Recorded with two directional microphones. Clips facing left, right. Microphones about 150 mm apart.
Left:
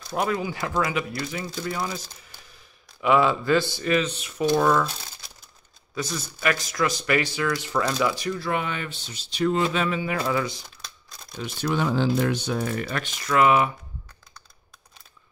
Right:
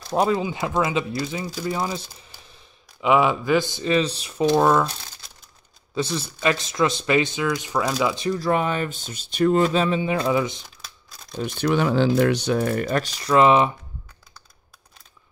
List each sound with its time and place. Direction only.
0.1 s speech: 25° right (ahead or behind)
3.0 s speech: 15° right (ahead or behind)
5.9 s speech: 30° right (ahead or behind)
8.3 s speech: 40° right (ahead or behind); by 10.6 s 20° right (ahead or behind)
10.8 s crumpling: 5° right (ahead or behind)
11.3 s speech: 55° right (ahead or behind); by 13.7 s 25° right (ahead or behind)